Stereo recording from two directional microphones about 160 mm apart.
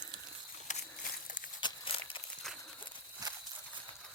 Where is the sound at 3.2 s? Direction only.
25° right (ahead or behind).